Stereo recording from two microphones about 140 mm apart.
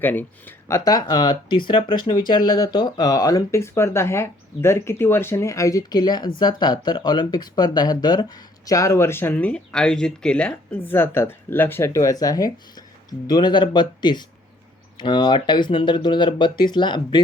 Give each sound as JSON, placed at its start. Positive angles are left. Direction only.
{"t": 0.0, "sound": "speech", "side_deg": 15}
{"t": 0.9, "sound": "speech", "side_deg": 25}